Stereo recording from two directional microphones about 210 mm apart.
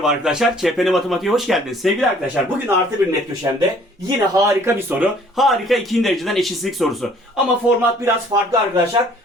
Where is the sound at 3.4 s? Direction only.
15° right (ahead or behind); by 7.4 s centre (ahead or behind).